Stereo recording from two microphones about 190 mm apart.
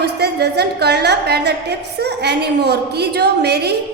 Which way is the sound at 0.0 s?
60° right (ahead or behind).